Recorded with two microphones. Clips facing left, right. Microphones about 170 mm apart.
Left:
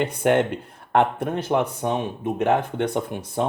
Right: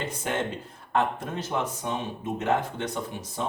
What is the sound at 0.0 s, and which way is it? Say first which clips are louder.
Speech: left 10 dB; 60° left (ahead or behind).